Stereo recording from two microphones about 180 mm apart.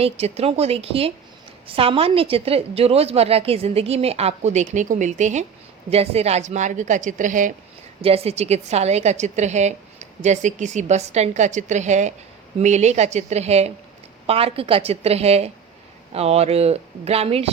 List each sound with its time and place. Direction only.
0.0 s a woman's voice: 35° right (ahead or behind)
8.0 s a woman's voice: 35° right (ahead or behind)